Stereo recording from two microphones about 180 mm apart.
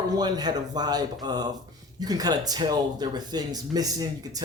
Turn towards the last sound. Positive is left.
turn(degrees=-20)  # may be behind; listen again after turning